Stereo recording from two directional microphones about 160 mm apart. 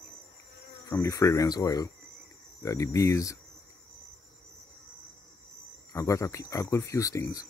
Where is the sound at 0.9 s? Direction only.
20° left (ahead or behind).